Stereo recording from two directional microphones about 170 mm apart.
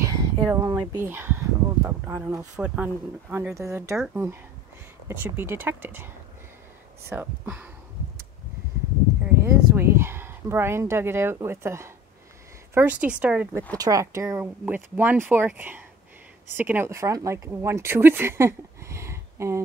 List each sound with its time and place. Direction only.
0.0 s a sound: 20° right (ahead or behind)
0.9 s speech: 10° right (ahead or behind)
7.1 s speech: 10° right (ahead or behind)
9.2 s speech: 15° right (ahead or behind)